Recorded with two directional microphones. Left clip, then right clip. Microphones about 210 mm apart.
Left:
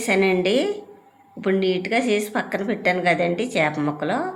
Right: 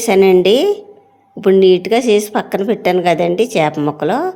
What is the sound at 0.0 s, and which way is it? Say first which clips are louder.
A woman's voice: right 10 dB; 45° right (ahead or behind).